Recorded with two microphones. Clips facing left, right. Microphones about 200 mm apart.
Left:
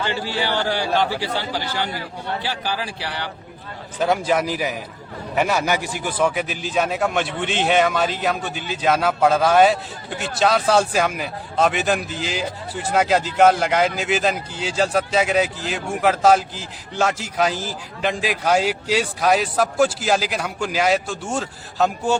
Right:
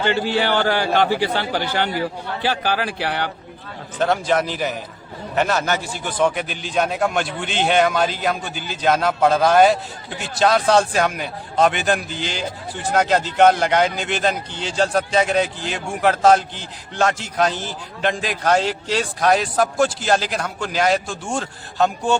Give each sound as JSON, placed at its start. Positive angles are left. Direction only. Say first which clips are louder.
{"t": 0.0, "sound": "a man's voice", "louder": "right 5 dB", "side_deg": -60}
{"t": 3.9, "sound": "a man's voice", "louder": "even", "side_deg": 5}